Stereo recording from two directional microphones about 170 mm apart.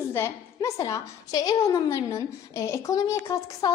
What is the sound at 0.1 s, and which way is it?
A woman's voice, 15° left (ahead or behind).